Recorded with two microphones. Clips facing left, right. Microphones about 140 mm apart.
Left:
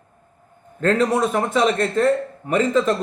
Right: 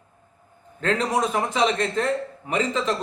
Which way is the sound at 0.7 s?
45° left (ahead or behind).